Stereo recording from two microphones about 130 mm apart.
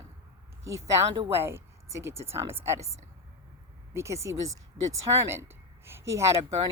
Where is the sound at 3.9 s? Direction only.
20° right (ahead or behind).